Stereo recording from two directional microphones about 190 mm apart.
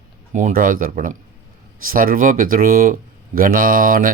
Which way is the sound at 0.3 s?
45° right (ahead or behind).